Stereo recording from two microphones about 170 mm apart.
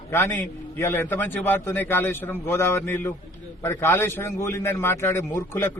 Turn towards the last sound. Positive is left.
turn(degrees=15)  # may be behind; listen again after turning